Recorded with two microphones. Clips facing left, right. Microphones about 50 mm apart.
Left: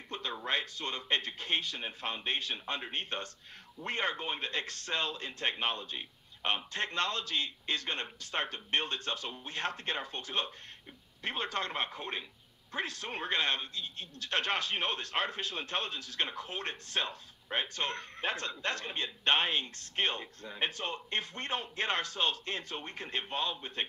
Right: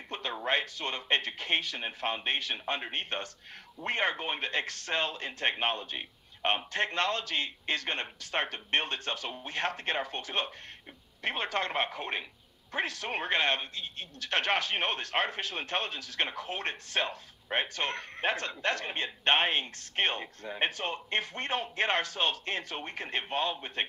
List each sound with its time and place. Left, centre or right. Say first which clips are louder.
0.1 s a sound: right 2 dB; right
0.5 s a man's voice: right 4 dB; right
1.2 s a man's voice: right 3 dB; right
2.1 s a man's voice: right 3 dB; right
9.3 s a man's voice: right 3 dB; right
9.6 s a man's voice: right 4 dB; right
12.8 s speech: right 5 dB; right
13.3 s a man's voice: right 3 dB; right
16.4 s a man's voice: right 4 dB; right